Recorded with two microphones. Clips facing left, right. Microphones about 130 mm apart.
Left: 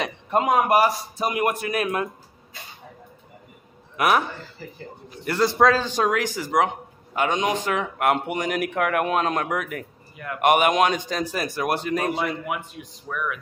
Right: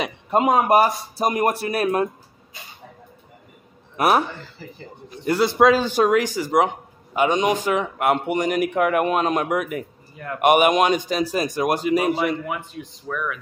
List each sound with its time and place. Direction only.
0.0 s speech: 20° right (ahead or behind)
1.1 s a man's voice: 40° right (ahead or behind)
3.9 s a man's voice: 35° right (ahead or behind)
5.4 s a man's voice: 5° right (ahead or behind)
12.7 s speech: 10° left (ahead or behind)